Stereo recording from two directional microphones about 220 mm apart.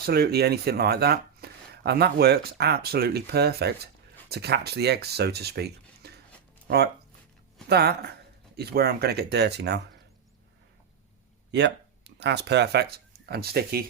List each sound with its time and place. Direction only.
0.0 s speech: 45° right (ahead or behind)
11.5 s speech: 50° right (ahead or behind)